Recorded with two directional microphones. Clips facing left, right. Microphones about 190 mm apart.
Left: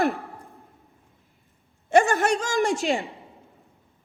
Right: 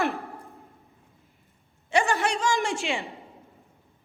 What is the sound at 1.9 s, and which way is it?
A man's voice, 45° left (ahead or behind).